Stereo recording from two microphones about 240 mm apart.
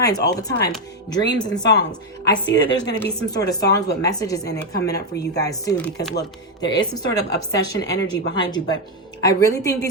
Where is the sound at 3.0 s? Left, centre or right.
Centre.